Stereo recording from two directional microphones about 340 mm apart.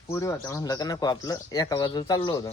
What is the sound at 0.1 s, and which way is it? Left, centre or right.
Speech, centre.